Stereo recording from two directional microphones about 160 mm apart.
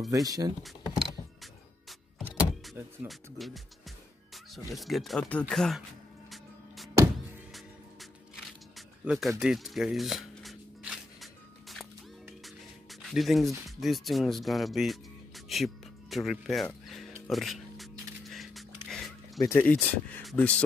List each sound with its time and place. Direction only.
0.1 s speech: 20° right (ahead or behind)
0.7 s music: centre (ahead or behind)
3.1 s speech: centre (ahead or behind)
4.6 s speech: centre (ahead or behind)
8.7 s music: centre (ahead or behind)
9.4 s shuffling cards: 5° right (ahead or behind)
11.7 s music: centre (ahead or behind)
13.0 s speech: centre (ahead or behind)
17.3 s music: centre (ahead or behind)
18.3 s a sound: centre (ahead or behind)
19.5 s speech: 10° left (ahead or behind)